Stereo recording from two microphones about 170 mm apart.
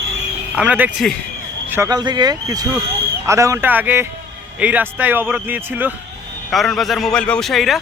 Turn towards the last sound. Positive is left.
turn(degrees=0)  # may be behind; listen again after turning